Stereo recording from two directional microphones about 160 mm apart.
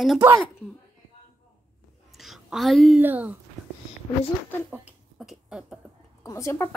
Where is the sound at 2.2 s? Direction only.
Centre (ahead or behind).